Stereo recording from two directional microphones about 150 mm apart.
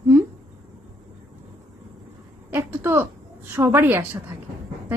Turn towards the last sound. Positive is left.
turn(degrees=-15)  # may be behind; listen again after turning